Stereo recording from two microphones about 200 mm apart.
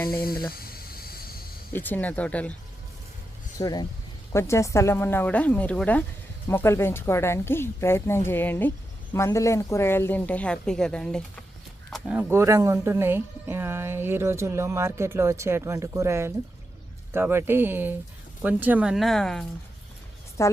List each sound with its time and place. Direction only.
0.5 s a sound: 50° left (ahead or behind)
1.7 s a woman's voice: 10° left (ahead or behind)
3.6 s a woman's voice: 20° left (ahead or behind); by 19.5 s centre (ahead or behind)
20.4 s a woman's voice: 15° left (ahead or behind)